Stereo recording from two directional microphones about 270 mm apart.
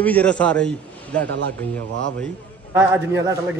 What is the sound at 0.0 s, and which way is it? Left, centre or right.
Speech, centre.